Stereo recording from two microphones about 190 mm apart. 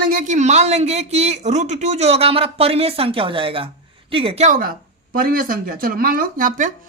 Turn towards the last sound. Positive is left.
turn(degrees=-45)  # may be behind; listen again after turning